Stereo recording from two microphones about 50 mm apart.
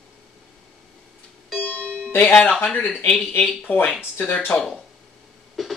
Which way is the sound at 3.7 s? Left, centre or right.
Left.